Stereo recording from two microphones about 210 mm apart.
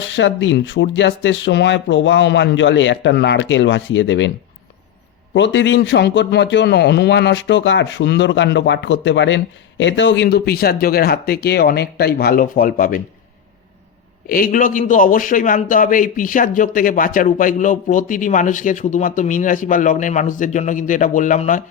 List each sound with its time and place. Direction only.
0.0 s a man's voice: 60° left (ahead or behind)
5.3 s a man's voice: 60° left (ahead or behind); by 13.0 s 40° left (ahead or behind)
14.3 s a man's voice: 45° left (ahead or behind)